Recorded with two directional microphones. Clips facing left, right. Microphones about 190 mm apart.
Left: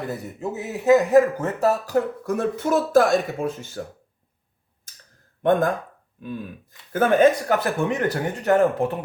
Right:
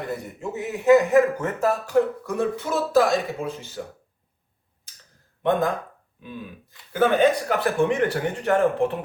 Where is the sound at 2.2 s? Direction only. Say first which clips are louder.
Left 2 dB; 50° left (ahead or behind).